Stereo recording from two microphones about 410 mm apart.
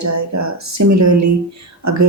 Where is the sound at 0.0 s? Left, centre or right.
Right.